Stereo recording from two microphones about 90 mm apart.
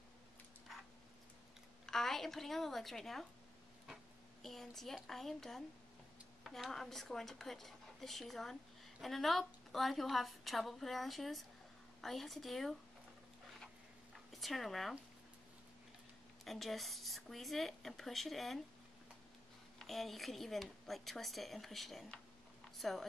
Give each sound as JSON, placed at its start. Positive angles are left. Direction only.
{"t": 1.9, "sound": "a woman's voice", "side_deg": 5}
{"t": 14.1, "sound": "speech", "side_deg": 0}
{"t": 16.4, "sound": "a woman's voice", "side_deg": 0}
{"t": 19.8, "sound": "a woman's voice", "side_deg": 0}